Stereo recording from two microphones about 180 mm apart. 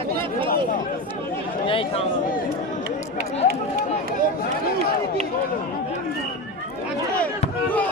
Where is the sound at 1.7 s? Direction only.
30° left (ahead or behind).